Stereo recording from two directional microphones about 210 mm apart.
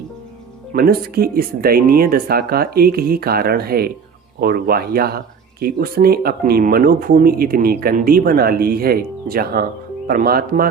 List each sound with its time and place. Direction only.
0.7 s speech: 45° right (ahead or behind)